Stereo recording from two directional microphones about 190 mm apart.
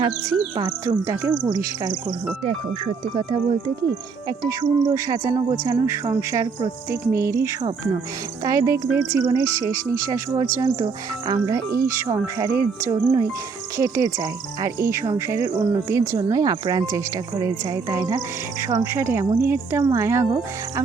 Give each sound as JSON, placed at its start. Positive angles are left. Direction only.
{"t": 0.0, "sound": "cricket", "side_deg": -20}
{"t": 4.3, "sound": "speech", "side_deg": -15}
{"t": 8.4, "sound": "speech", "side_deg": -15}
{"t": 17.7, "sound": "cricket", "side_deg": -20}
{"t": 18.6, "sound": "speech", "side_deg": -15}